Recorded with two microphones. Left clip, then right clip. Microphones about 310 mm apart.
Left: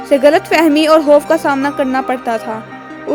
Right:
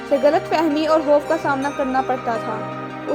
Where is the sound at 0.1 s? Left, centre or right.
Left.